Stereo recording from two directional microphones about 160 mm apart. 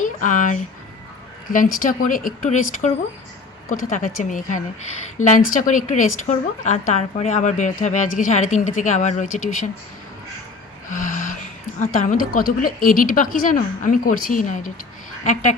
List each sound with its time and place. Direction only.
0.0 s a woman's voice: 55° left (ahead or behind)
3.9 s a woman's voice: 50° left (ahead or behind)
10.9 s gasp: 55° left (ahead or behind)
11.8 s a woman's voice: 55° left (ahead or behind)